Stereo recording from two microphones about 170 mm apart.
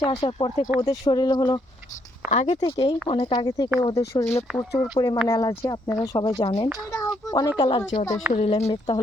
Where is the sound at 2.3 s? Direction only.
45° left (ahead or behind).